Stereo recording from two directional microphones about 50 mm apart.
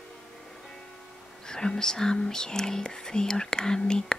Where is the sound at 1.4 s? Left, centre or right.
Centre.